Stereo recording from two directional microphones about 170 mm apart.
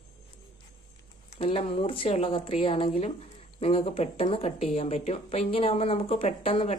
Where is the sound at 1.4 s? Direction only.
35° left (ahead or behind).